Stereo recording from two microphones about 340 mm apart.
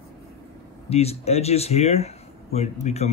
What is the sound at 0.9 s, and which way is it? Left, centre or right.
Speech, centre.